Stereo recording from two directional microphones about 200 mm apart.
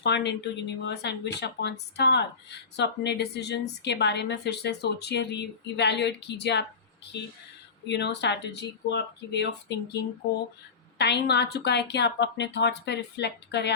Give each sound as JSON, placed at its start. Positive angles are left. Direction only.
{"t": 0.0, "sound": "a woman's voice", "side_deg": 60}
{"t": 7.9, "sound": "a woman's voice", "side_deg": 60}